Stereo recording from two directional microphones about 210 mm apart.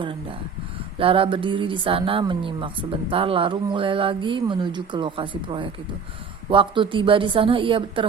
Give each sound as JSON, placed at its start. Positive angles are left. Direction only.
{"t": 0.0, "sound": "speech", "side_deg": -25}